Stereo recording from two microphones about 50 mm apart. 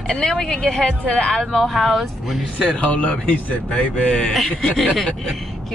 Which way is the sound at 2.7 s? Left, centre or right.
Left.